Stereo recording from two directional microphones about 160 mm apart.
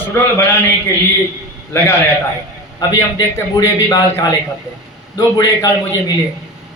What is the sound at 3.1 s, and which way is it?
Speech, 25° left (ahead or behind).